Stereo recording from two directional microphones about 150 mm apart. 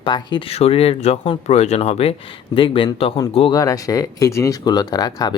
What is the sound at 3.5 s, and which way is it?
Speech, 25° left (ahead or behind).